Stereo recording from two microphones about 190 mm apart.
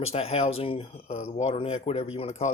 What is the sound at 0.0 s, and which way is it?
A man's voice, 30° left (ahead or behind).